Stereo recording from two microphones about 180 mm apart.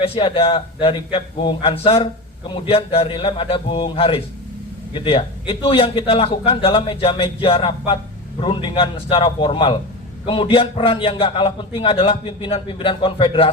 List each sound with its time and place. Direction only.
0.0 s a man's voice: 30° left (ahead or behind)